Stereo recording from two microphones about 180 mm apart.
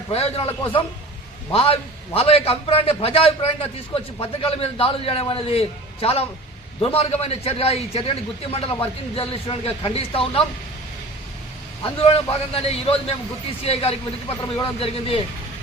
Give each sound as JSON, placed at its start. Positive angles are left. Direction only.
{"t": 0.1, "sound": "a man's voice", "side_deg": 35}
{"t": 11.8, "sound": "a man's voice", "side_deg": 30}